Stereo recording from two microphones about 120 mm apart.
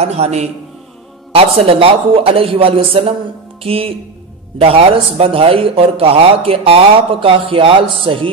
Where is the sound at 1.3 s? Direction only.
55° right (ahead or behind).